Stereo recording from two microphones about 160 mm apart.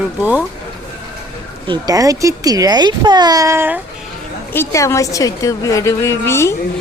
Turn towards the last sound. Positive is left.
turn(degrees=15)  # may be behind; listen again after turning